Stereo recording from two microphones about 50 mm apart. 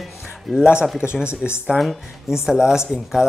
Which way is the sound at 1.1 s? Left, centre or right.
Right.